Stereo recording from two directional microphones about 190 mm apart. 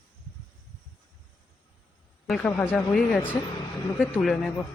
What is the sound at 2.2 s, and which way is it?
A man's voice, centre (ahead or behind).